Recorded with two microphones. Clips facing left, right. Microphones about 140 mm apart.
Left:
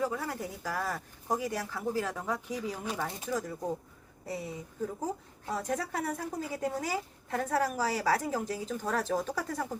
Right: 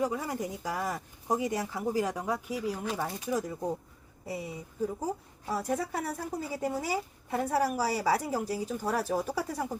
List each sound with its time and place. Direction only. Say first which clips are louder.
0.0 s a woman's voice: right 2 dB; 15° right (ahead or behind)
4.3 s a woman's voice: even; 10° right (ahead or behind)